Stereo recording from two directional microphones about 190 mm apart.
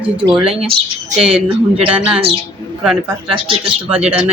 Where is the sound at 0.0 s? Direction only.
30° right (ahead or behind).